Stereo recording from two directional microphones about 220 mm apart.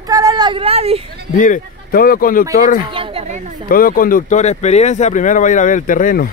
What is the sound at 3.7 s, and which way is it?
Speech, 40° left (ahead or behind).